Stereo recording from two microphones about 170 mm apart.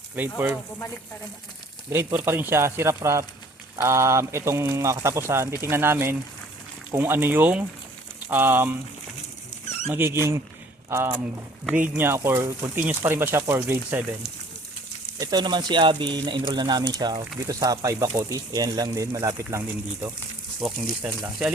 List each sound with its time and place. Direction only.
0.2 s speech: 10° right (ahead or behind)
1.9 s speech: 15° right (ahead or behind)
9.9 s speech: 15° right (ahead or behind)
15.2 s speech: 25° right (ahead or behind)
20.6 s speech: centre (ahead or behind)